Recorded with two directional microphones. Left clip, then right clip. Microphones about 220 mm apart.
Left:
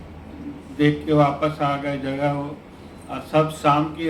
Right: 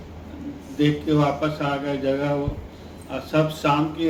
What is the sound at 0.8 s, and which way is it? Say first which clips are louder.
Speech: left 3 dB; 50° left (ahead or behind).